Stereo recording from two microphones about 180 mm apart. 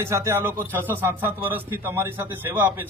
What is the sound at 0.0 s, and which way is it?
Speech, 15° right (ahead or behind).